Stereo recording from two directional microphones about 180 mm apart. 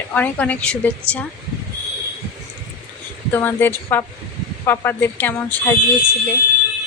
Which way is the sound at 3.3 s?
10° left (ahead or behind).